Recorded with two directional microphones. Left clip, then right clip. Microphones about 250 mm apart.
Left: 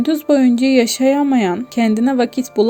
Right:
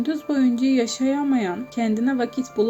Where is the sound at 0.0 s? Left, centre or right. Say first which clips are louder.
Left 8 dB; left.